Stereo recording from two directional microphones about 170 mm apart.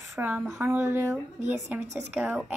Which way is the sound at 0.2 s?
10° right (ahead or behind).